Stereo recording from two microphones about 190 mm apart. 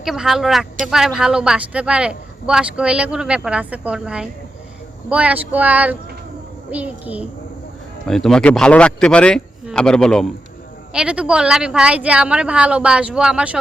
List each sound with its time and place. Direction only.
0.0 s speech: centre (ahead or behind)